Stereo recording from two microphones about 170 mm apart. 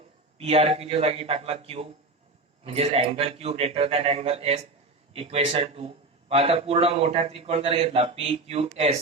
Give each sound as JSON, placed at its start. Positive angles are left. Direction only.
{"t": 0.3, "sound": "a man's voice", "side_deg": -35}